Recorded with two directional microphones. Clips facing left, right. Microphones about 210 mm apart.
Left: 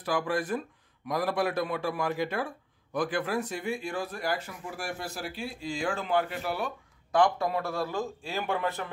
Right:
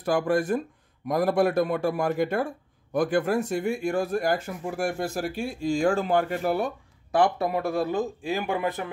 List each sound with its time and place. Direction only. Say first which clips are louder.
0.0 s speech: right 6 dB; 45° right (ahead or behind)
7.3 s speech: right 4 dB; 20° right (ahead or behind)